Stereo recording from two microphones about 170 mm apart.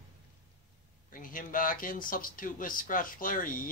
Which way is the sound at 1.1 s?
50° left (ahead or behind).